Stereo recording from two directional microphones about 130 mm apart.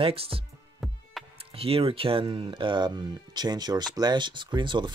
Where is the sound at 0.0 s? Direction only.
45° right (ahead or behind).